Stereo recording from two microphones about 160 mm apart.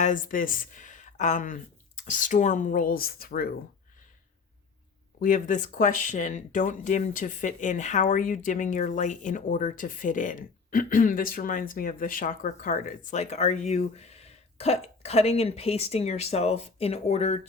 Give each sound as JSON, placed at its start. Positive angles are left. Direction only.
{"t": 0.0, "sound": "speech", "side_deg": 55}
{"t": 5.2, "sound": "speech", "side_deg": 55}